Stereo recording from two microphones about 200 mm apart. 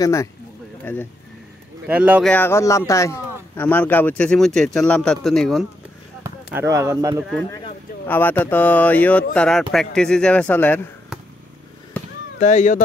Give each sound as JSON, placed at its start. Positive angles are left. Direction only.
{"t": 0.0, "sound": "speech", "side_deg": 15}
{"t": 1.9, "sound": "speech", "side_deg": -5}
{"t": 2.2, "sound": "a man's voice", "side_deg": 10}
{"t": 6.2, "sound": "speech", "side_deg": -15}
{"t": 8.1, "sound": "a man's voice", "side_deg": 10}
{"t": 12.4, "sound": "speech", "side_deg": 35}